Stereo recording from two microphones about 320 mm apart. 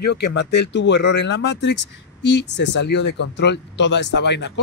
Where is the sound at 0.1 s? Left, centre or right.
Left.